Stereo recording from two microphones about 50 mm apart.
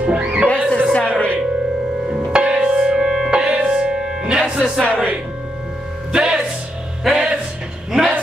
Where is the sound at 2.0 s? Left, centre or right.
Centre.